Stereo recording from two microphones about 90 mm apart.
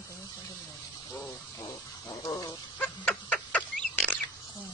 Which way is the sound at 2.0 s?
40° left (ahead or behind).